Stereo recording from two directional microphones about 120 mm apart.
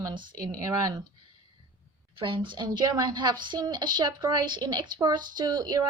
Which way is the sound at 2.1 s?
45° right (ahead or behind).